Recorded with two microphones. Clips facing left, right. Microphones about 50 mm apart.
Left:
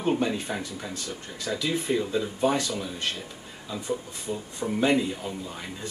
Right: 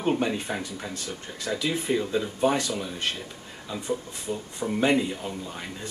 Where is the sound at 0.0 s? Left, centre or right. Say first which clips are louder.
Even; centre.